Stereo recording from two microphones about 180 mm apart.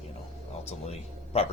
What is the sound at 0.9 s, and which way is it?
Speech, 35° left (ahead or behind).